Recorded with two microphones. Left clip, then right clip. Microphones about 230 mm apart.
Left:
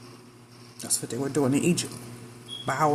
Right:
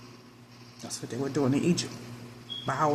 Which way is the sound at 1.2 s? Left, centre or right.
Centre.